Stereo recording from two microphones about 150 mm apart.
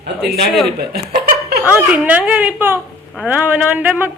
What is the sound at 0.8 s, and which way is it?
Chuckle, 85° right.